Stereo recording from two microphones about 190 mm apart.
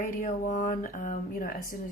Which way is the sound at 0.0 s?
45° left (ahead or behind).